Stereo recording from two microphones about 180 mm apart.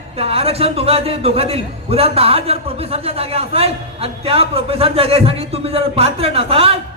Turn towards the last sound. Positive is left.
turn(degrees=-30)  # may be behind; listen again after turning